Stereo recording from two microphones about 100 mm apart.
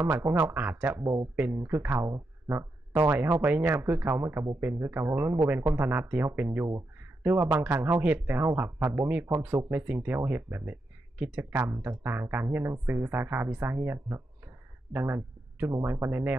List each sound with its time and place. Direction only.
0.0 s speech: 20° right (ahead or behind)
11.6 s speech: 25° right (ahead or behind)